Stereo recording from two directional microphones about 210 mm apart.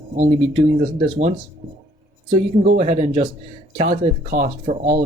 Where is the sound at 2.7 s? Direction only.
35° right (ahead or behind).